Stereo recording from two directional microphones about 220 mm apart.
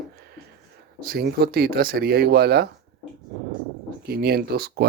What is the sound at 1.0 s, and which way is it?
Speech, 45° right (ahead or behind).